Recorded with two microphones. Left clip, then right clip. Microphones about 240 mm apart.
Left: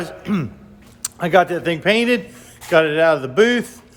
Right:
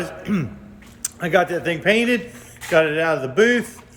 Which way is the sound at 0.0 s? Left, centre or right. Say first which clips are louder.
Left 1 dB; centre.